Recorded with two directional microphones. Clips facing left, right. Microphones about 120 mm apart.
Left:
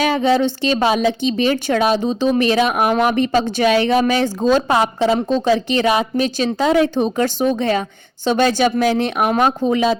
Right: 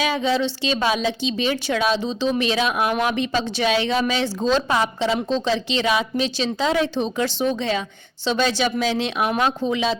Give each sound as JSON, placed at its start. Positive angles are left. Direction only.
{"t": 0.1, "sound": "speech", "side_deg": 55}